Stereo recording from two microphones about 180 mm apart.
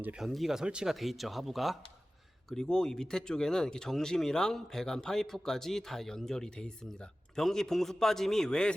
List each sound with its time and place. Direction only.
0.0 s speech: 5° right (ahead or behind)